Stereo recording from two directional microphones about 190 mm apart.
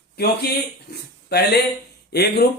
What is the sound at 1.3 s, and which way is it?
Speech, 55° left (ahead or behind).